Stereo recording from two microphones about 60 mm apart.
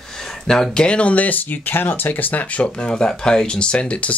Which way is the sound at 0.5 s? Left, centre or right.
Centre.